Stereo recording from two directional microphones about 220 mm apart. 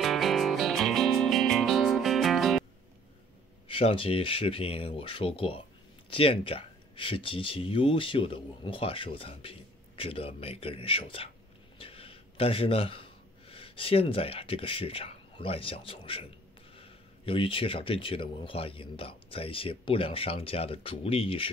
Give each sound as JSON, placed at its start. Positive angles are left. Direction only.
{"t": 0.0, "sound": "music", "side_deg": 0}
{"t": 3.6, "sound": "speech", "side_deg": 25}